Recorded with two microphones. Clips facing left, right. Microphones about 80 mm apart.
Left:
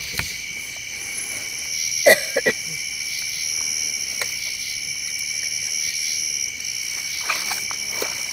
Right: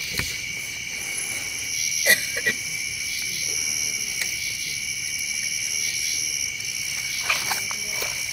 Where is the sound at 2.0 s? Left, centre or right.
Left.